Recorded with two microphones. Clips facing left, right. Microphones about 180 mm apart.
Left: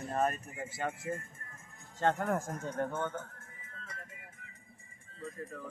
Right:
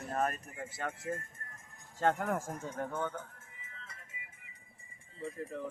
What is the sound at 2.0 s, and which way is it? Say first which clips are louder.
Speech: left 1 dB; 5° right (ahead or behind).